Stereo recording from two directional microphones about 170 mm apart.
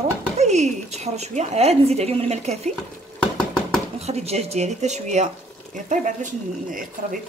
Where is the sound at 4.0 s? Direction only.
40° right (ahead or behind).